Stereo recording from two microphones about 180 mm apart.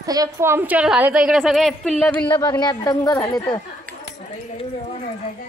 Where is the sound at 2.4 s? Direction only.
25° left (ahead or behind).